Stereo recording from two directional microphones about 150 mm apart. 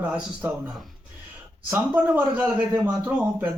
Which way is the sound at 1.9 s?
10° right (ahead or behind).